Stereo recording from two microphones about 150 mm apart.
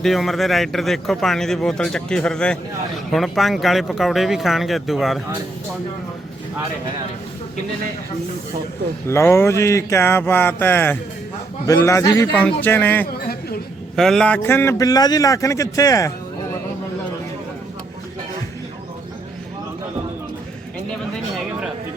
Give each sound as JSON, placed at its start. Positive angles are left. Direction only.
{"t": 0.0, "sound": "speech", "side_deg": 0}
{"t": 9.0, "sound": "a man's voice", "side_deg": 15}
{"t": 12.3, "sound": "a man's voice", "side_deg": 10}